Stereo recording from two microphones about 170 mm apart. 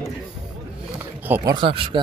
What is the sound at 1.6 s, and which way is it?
Speech, 30° right (ahead or behind).